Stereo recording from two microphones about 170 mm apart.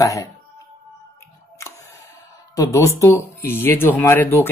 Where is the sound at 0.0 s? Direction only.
20° left (ahead or behind).